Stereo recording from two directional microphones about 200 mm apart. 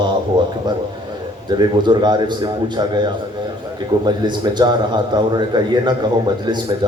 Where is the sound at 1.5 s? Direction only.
20° right (ahead or behind).